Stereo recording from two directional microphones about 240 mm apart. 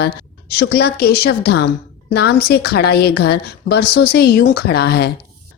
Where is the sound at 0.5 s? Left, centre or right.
Left.